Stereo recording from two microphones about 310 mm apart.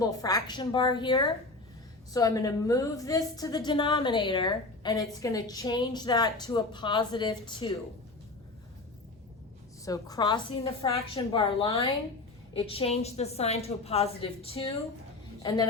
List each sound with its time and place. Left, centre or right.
0.0 s a woman's voice: centre
9.8 s a woman's voice: centre